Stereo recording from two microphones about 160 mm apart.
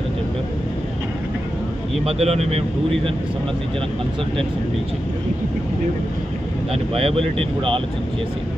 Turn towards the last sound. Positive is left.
turn(degrees=-35)  # may be behind; listen again after turning